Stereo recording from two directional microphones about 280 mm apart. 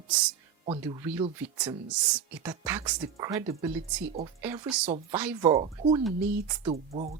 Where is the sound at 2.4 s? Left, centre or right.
Centre.